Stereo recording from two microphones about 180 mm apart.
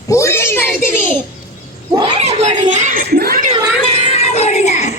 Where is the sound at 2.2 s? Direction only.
35° right (ahead or behind); by 3.3 s 55° right (ahead or behind).